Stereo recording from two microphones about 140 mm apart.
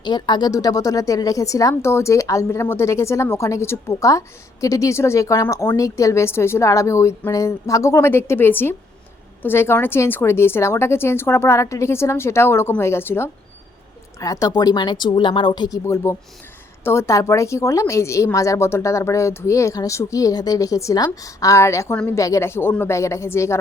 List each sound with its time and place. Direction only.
0.0 s a woman's voice: 30° left (ahead or behind)